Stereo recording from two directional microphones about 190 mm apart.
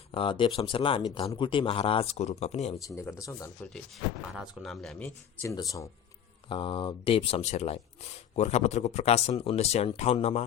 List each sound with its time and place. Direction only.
0.1 s speech: 25° left (ahead or behind)
2.8 s speech: 15° left (ahead or behind)
3.7 s speech: centre (ahead or behind); by 5.9 s 15° left (ahead or behind)
6.5 s speech: 25° left (ahead or behind)